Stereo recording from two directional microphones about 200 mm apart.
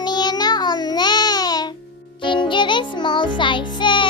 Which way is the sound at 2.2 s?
25° left (ahead or behind).